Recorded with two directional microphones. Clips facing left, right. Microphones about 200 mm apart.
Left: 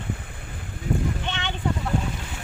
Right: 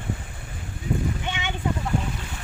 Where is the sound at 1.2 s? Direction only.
10° right (ahead or behind).